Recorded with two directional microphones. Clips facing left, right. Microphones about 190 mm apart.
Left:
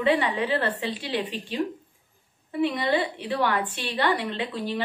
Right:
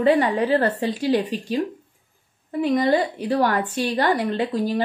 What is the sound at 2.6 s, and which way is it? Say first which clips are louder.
A woman's voice: right 5 dB; 40° right (ahead or behind).